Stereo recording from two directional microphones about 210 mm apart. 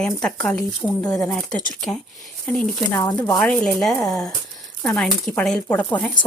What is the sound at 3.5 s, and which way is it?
Speech, 5° left (ahead or behind).